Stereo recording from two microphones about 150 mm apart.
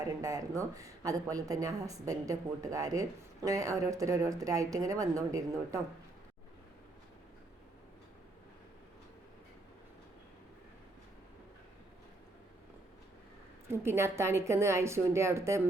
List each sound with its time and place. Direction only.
0.0 s a woman's voice: 20° right (ahead or behind)
13.7 s a woman's voice: 15° right (ahead or behind)